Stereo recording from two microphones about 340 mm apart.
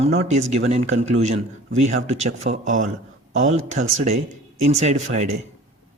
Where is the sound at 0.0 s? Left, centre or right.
Centre.